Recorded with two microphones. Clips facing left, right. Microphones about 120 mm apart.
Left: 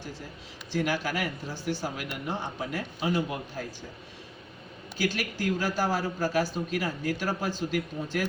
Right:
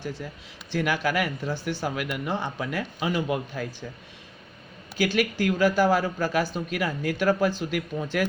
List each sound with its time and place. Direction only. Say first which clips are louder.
0.7 s speech: right 3 dB; 70° right (ahead or behind)
4.9 s speech: right 6 dB; 70° right (ahead or behind)